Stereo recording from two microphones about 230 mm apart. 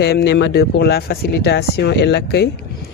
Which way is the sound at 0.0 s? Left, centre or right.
Left.